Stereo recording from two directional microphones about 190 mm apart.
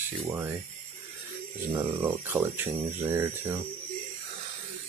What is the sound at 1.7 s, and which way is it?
Speech, 15° right (ahead or behind).